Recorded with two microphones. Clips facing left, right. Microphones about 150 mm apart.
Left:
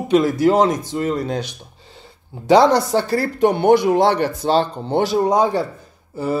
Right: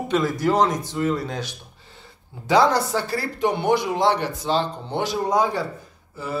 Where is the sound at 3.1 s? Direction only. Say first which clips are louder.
Left 8 dB; 55° left (ahead or behind).